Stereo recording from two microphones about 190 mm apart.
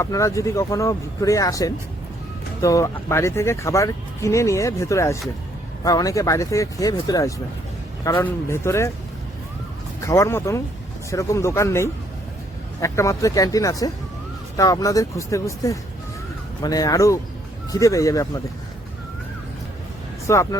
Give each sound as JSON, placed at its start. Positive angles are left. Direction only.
{"t": 0.0, "sound": "speech", "side_deg": 15}
{"t": 10.0, "sound": "speech", "side_deg": 15}
{"t": 20.2, "sound": "speech", "side_deg": 15}